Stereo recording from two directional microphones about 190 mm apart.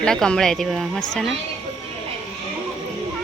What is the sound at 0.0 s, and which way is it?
A woman's voice, 5° left (ahead or behind).